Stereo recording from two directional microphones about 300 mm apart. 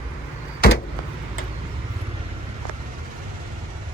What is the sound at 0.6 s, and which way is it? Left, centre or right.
Vehicle, left.